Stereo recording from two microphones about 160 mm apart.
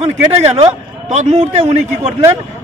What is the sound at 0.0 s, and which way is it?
A man's voice, 40° right (ahead or behind).